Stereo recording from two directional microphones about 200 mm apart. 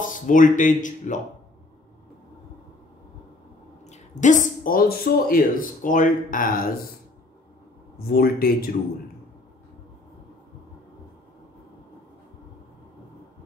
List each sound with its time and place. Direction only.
0.0 s speech: 40° left (ahead or behind)
3.8 s speech: 35° left (ahead or behind)
8.1 s speech: 50° left (ahead or behind)